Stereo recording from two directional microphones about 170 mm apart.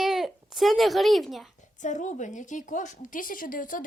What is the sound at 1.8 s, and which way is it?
A woman's voice, 45° left (ahead or behind).